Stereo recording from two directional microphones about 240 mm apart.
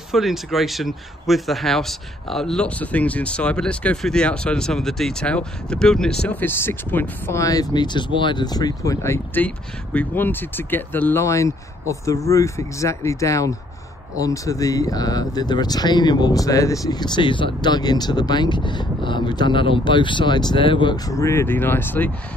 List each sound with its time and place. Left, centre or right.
0.1 s speech: centre